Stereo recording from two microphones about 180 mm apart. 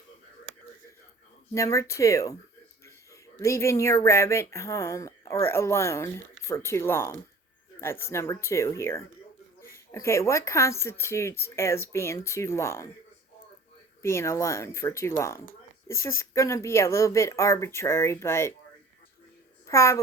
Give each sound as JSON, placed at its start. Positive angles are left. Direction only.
{"t": 1.5, "sound": "speech", "side_deg": 15}
{"t": 14.0, "sound": "speech", "side_deg": 15}
{"t": 19.6, "sound": "a woman's voice", "side_deg": 15}